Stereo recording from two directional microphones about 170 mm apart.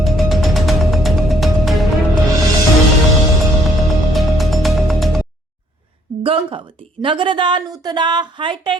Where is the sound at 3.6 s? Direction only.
Centre (ahead or behind).